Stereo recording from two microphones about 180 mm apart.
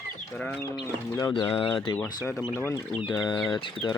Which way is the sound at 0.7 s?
25° left (ahead or behind).